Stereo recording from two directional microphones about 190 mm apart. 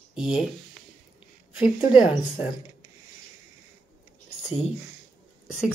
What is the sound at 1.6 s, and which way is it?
Speech, 25° left (ahead or behind).